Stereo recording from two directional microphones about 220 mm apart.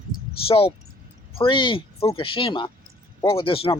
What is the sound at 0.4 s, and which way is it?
Speech, 25° left (ahead or behind).